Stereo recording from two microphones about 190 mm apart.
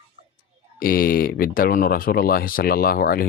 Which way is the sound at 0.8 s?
50° left (ahead or behind).